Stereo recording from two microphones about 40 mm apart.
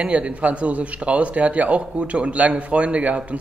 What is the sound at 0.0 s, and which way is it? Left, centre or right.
Speech, right.